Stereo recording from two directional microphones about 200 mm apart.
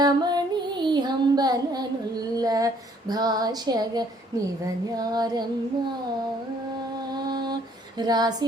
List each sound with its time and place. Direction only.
0.0 s music: 20° right (ahead or behind)
2.3 s a sound: 20° right (ahead or behind)
3.1 s female singing: 20° right (ahead or behind)
7.1 s mantra: 20° right (ahead or behind)
7.9 s female singing: 20° right (ahead or behind)